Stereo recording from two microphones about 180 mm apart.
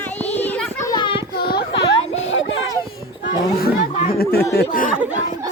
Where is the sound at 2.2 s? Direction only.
90° left.